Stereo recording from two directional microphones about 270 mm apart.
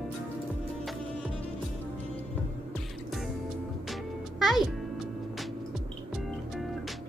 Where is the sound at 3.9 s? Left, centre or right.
Centre.